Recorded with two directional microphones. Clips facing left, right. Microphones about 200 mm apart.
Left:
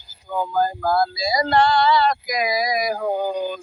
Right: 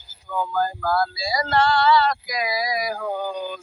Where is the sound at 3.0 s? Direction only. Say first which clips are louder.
Left 4 dB; 30° left (ahead or behind).